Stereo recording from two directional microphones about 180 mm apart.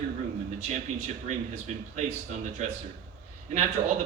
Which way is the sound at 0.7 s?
40° right (ahead or behind).